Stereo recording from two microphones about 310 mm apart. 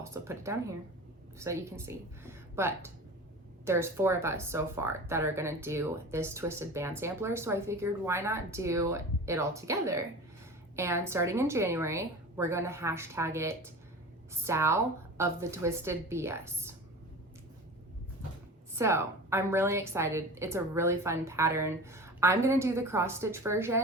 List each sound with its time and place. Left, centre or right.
0.0 s a woman's voice: centre
18.8 s speech: centre